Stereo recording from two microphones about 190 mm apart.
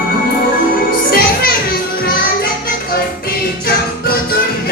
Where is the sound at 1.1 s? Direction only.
50° left (ahead or behind).